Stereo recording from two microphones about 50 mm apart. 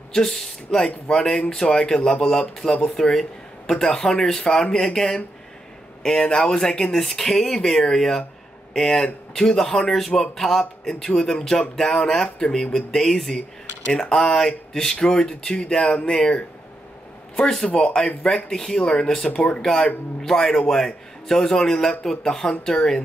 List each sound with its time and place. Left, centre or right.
0.1 s speech: centre
6.2 s speech: centre
22.5 s speech: left